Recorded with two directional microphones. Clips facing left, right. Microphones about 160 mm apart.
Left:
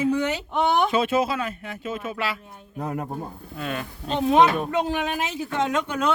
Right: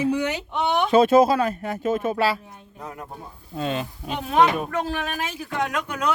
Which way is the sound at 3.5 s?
25° right (ahead or behind).